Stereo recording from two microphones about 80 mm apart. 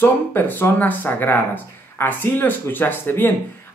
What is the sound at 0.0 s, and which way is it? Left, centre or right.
Speech, left.